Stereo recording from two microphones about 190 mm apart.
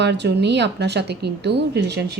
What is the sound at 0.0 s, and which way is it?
A woman's voice, 65° right (ahead or behind).